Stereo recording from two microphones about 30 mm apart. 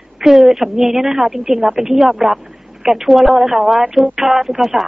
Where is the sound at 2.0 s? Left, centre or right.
Centre.